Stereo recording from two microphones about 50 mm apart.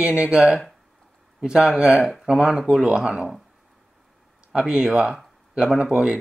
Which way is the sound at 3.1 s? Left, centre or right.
Centre.